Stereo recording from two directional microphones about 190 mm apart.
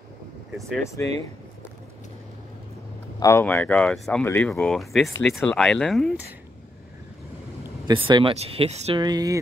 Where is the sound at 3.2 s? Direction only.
10° left (ahead or behind).